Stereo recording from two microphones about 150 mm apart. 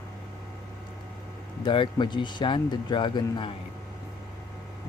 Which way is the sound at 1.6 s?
30° left (ahead or behind).